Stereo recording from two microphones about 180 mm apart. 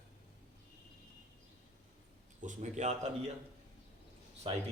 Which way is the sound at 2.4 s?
40° right (ahead or behind).